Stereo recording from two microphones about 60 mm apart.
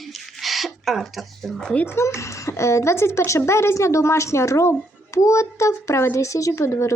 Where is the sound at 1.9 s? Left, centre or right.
Left.